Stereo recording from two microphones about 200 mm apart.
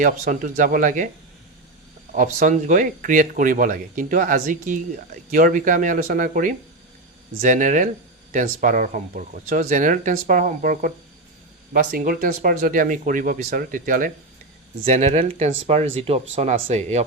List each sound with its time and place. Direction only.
0.0 s speech: 40° right (ahead or behind)
2.1 s speech: 40° right (ahead or behind)